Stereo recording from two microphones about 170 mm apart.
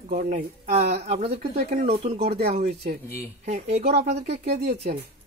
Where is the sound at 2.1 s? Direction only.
65° right (ahead or behind).